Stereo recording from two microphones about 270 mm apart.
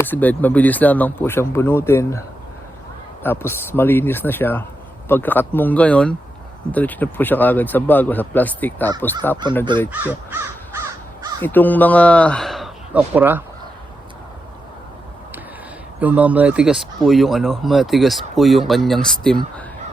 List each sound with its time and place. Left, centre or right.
0.0 s speech: centre
3.2 s speech: centre
9.4 s speech: centre
9.9 s crow: centre
11.4 s speech: centre
16.0 s speech: centre